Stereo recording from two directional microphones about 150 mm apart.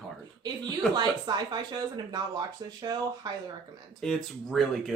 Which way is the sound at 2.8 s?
30° right (ahead or behind).